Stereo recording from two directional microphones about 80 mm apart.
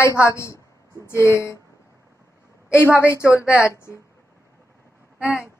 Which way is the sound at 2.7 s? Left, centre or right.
Left.